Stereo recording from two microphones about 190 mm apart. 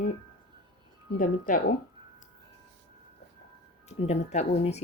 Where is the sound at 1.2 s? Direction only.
45° left (ahead or behind).